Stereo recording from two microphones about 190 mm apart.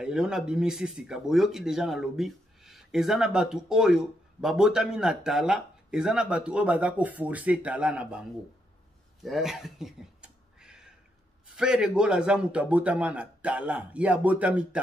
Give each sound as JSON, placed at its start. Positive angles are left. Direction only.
{"t": 0.0, "sound": "speech", "side_deg": -5}
{"t": 9.2, "sound": "a sound", "side_deg": 0}
{"t": 11.4, "sound": "a man's voice", "side_deg": -5}